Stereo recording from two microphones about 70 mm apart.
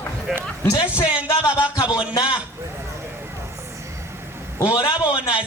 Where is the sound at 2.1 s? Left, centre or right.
Left.